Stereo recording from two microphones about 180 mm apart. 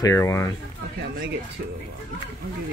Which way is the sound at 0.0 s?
15° left (ahead or behind).